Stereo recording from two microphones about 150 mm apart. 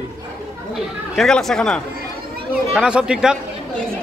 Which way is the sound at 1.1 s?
5° left (ahead or behind).